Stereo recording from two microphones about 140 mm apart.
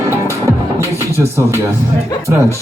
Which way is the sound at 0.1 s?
20° right (ahead or behind).